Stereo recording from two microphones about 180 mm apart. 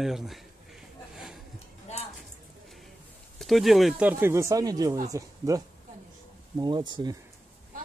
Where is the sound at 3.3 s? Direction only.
Centre (ahead or behind); by 7.1 s 25° right (ahead or behind).